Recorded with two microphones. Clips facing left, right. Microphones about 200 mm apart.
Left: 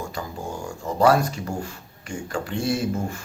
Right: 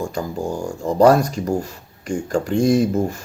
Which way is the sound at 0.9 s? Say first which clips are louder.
Right 5 dB; 40° right (ahead or behind).